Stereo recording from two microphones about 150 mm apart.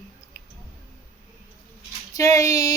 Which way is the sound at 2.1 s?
20° left (ahead or behind).